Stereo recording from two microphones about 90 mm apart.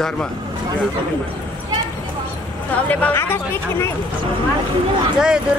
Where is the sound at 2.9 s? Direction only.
15° left (ahead or behind).